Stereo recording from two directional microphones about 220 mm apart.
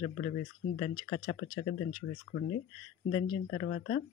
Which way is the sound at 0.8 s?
20° left (ahead or behind).